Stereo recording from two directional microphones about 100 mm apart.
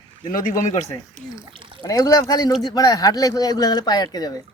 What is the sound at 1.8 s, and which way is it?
Speech, 35° left (ahead or behind).